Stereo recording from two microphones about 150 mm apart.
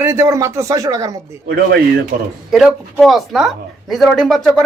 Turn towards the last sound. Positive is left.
turn(degrees=0)  # may be behind; listen again after turning